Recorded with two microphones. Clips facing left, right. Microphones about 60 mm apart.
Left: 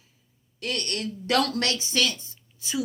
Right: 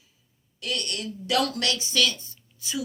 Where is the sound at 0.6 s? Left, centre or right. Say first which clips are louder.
Left 1 dB; left.